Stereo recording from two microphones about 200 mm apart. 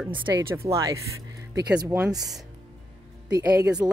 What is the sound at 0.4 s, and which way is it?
Speech, 15° right (ahead or behind).